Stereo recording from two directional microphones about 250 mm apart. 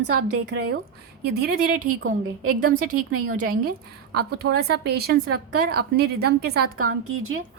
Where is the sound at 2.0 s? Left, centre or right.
Right.